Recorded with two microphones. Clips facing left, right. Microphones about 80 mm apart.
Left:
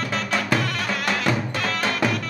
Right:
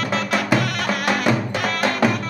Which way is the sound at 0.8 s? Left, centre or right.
Centre.